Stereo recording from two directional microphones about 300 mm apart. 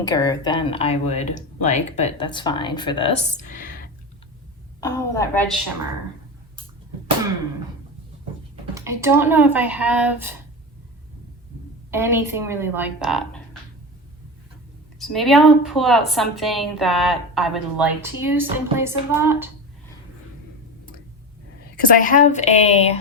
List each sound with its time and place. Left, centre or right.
0.0 s speech: centre
4.8 s speech: centre
8.7 s speech: centre
11.9 s speech: centre
14.9 s a woman's voice: centre
22.0 s speech: left